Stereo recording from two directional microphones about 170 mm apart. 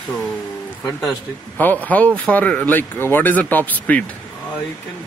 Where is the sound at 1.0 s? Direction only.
5° left (ahead or behind).